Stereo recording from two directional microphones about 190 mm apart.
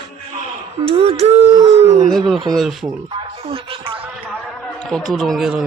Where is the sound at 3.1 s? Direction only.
30° right (ahead or behind).